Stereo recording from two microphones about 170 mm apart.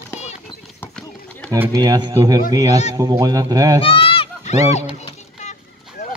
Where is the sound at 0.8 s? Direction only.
5° left (ahead or behind).